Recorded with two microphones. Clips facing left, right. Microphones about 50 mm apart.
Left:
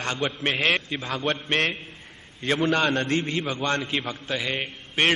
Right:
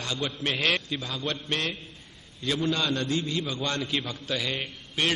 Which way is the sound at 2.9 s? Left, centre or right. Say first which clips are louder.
Left 4 dB; left.